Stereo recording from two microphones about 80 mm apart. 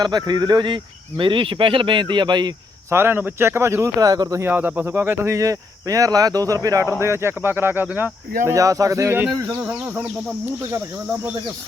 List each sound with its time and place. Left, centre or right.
0.0 s speech: right
2.9 s speech: right
4.4 s speech: right
5.3 s speech: right
7.0 s speech: right
8.4 s speech: right
9.6 s speech: centre